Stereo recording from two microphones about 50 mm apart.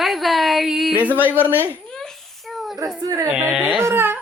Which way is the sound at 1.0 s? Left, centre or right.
Right.